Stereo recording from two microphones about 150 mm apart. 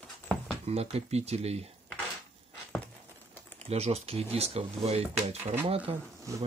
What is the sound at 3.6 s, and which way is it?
Speech, 45° right (ahead or behind).